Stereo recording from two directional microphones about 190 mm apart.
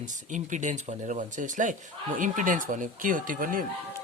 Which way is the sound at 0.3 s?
40° right (ahead or behind).